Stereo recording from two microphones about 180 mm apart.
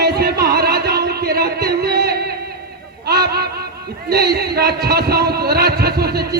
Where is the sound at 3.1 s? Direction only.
60° right (ahead or behind).